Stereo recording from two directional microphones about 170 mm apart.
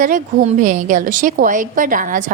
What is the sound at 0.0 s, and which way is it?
A woman's voice, 50° right (ahead or behind).